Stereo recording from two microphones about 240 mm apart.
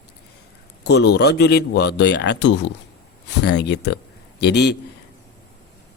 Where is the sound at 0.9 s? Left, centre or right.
Left.